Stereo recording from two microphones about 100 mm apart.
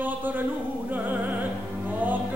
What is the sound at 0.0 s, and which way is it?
Speech, 15° right (ahead or behind).